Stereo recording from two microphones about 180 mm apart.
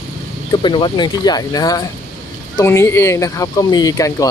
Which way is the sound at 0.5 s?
25° left (ahead or behind).